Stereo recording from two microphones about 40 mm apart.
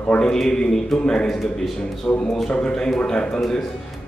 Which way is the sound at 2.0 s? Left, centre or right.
Left.